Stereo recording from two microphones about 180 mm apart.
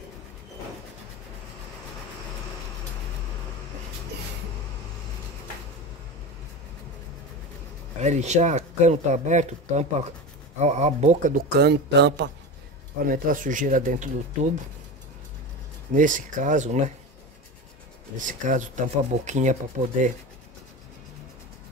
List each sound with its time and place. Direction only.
8.0 s speech: 40° right (ahead or behind)
11.5 s speech: 65° right (ahead or behind)
13.0 s speech: 50° right (ahead or behind)
15.9 s speech: 45° right (ahead or behind)
18.1 s speech: 45° right (ahead or behind)